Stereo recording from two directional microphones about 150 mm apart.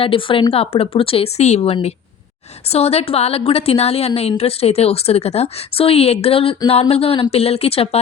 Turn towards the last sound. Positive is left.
turn(degrees=40)  # may be behind; listen again after turning